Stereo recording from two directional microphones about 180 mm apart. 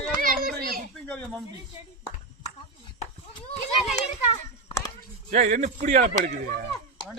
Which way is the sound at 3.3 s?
35° left (ahead or behind).